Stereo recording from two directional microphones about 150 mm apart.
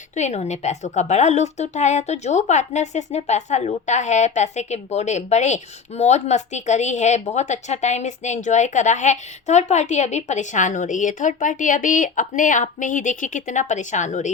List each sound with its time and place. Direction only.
0.2 s a woman's voice: 50° left (ahead or behind)